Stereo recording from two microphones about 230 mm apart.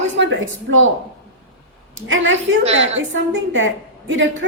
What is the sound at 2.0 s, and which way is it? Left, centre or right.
A woman's voice, right.